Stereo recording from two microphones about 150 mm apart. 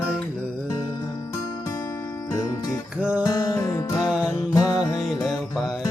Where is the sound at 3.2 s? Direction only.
20° left (ahead or behind).